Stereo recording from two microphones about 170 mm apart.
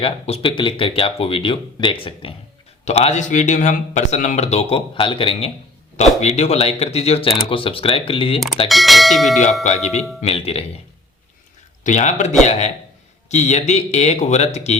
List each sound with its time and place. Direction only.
0.0 s speech: 30° left (ahead or behind)
8.6 s speech: centre (ahead or behind)
9.6 s speech: 40° left (ahead or behind)
11.8 s speech: 45° left (ahead or behind)